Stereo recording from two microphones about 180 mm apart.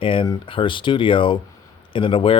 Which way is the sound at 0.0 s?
30° left (ahead or behind).